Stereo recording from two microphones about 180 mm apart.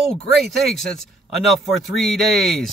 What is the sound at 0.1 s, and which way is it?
Speech, centre (ahead or behind).